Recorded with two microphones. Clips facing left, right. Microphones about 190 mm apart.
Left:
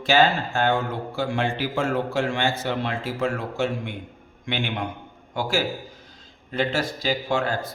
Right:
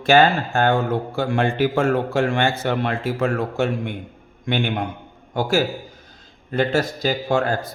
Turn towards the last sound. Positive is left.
turn(degrees=-45)  # may be behind; listen again after turning